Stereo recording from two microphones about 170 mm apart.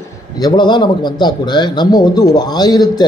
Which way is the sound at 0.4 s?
25° left (ahead or behind).